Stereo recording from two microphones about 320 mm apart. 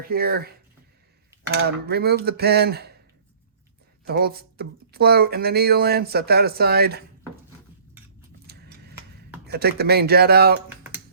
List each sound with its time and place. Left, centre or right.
0.0 s speech: right
1.5 s speech: right
4.0 s speech: right
8.4 s a sound: right
9.5 s speech: right